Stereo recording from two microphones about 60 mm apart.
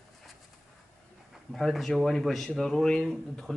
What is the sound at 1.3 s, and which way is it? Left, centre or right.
Speech, centre.